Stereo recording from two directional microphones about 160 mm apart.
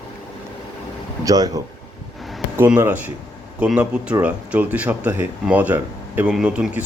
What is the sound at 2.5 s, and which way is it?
Speech, 10° right (ahead or behind).